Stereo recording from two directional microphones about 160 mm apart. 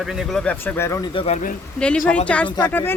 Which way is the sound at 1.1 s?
40° left (ahead or behind).